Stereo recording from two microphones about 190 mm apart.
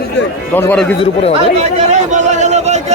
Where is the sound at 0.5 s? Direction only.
10° left (ahead or behind).